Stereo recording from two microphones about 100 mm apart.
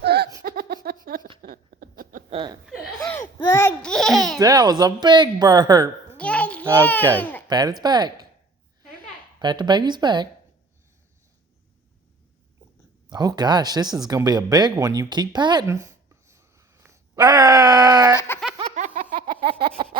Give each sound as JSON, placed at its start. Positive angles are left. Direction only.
{"t": 0.3, "sound": "laughter", "side_deg": -35}
{"t": 3.3, "sound": "a sound", "side_deg": 25}
{"t": 3.8, "sound": "babbling", "side_deg": 5}
{"t": 4.4, "sound": "speech", "side_deg": -40}
{"t": 6.1, "sound": "a sound", "side_deg": 15}
{"t": 6.8, "sound": "speech", "side_deg": 15}
{"t": 7.4, "sound": "speech", "side_deg": -45}
{"t": 9.4, "sound": "speech", "side_deg": -50}
{"t": 13.1, "sound": "speech", "side_deg": -40}
{"t": 15.6, "sound": "a sound", "side_deg": -30}
{"t": 17.2, "sound": "groan", "side_deg": -40}
{"t": 18.3, "sound": "laughter", "side_deg": 25}
{"t": 19.3, "sound": "a sound", "side_deg": -65}